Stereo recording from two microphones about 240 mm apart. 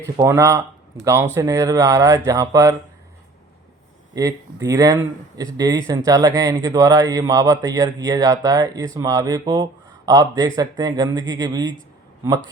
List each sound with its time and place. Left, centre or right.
0.0 s speech: centre
4.1 s speech: centre